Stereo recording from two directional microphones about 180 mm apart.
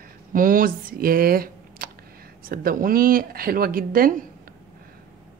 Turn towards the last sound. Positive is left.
turn(degrees=-55)  # may be behind; listen again after turning